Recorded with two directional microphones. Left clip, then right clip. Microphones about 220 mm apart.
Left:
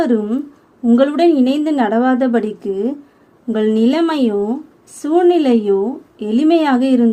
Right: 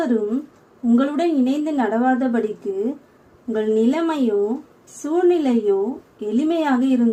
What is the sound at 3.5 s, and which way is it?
A woman's voice, 45° left (ahead or behind).